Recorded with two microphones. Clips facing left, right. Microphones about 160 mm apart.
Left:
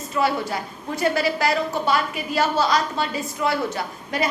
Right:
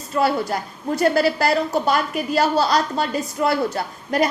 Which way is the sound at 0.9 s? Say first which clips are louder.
Right 4 dB; 35° right (ahead or behind).